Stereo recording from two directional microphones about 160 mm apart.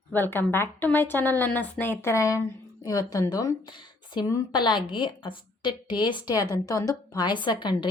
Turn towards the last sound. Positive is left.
turn(degrees=30)  # may be behind; listen again after turning